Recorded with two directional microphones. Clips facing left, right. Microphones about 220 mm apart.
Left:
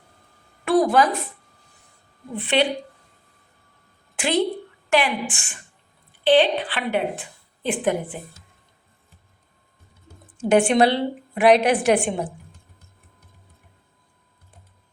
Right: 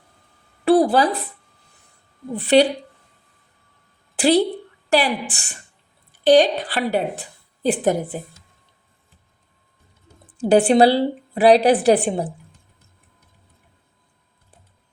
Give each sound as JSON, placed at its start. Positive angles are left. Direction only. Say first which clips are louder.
{"t": 0.6, "sound": "a woman's voice", "louder": "right 3 dB", "side_deg": -35}
{"t": 2.3, "sound": "a woman's voice", "louder": "right 6 dB", "side_deg": -40}
{"t": 4.1, "sound": "a woman's voice", "louder": "right 5 dB", "side_deg": -35}
{"t": 10.4, "sound": "a woman's voice", "louder": "right 3 dB", "side_deg": -35}